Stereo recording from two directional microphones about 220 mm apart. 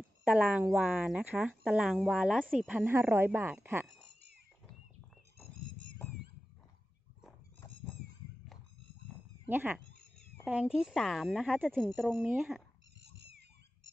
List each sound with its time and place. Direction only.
0.2 s speech: 5° right (ahead or behind)
9.5 s speech: 10° right (ahead or behind)
13.0 s cat: 50° right (ahead or behind)